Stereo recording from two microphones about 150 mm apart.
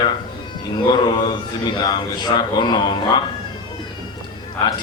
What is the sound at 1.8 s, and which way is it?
A man's voice, 30° left (ahead or behind).